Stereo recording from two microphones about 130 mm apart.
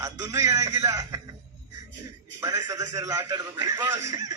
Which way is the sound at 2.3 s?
25° right (ahead or behind).